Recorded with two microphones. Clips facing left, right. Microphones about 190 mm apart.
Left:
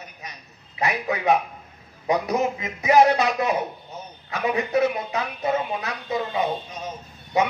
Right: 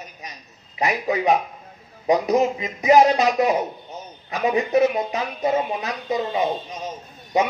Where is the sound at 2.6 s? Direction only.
20° right (ahead or behind).